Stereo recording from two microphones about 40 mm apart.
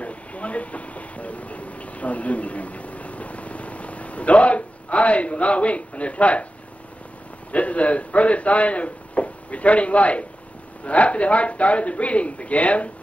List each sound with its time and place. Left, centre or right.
0.0 s vehicle: left
7.5 s speech: left